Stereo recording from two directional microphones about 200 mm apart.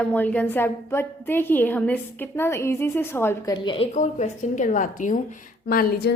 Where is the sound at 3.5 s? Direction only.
25° left (ahead or behind); by 6.1 s 45° left (ahead or behind).